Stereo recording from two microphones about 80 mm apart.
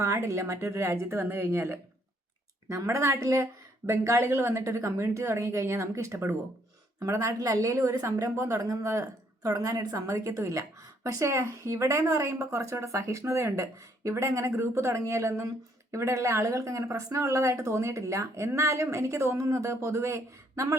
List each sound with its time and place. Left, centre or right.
0.0 s a woman's voice: right
2.6 s a woman's voice: right